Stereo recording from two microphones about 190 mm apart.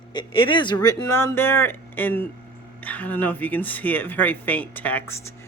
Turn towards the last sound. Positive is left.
turn(degrees=10)  # may be behind; listen again after turning